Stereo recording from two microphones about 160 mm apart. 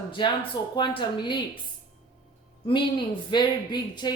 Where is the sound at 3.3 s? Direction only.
25° left (ahead or behind).